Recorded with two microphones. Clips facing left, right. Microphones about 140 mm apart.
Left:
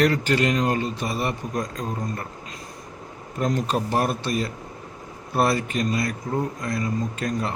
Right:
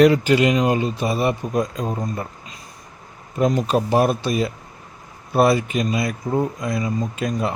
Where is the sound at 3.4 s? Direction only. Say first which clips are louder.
Right 5 dB; 10° right (ahead or behind).